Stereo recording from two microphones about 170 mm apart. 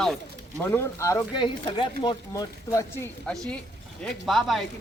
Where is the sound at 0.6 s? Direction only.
15° left (ahead or behind).